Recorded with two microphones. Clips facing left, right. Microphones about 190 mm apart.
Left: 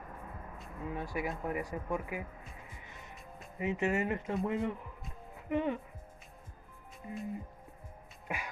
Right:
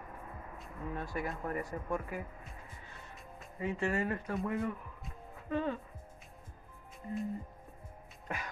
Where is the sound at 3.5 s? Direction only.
20° left (ahead or behind).